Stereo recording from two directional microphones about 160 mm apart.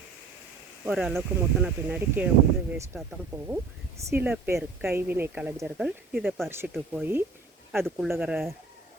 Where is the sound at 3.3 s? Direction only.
20° right (ahead or behind).